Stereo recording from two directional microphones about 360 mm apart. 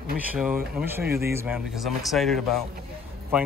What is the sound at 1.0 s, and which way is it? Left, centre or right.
Speech, right.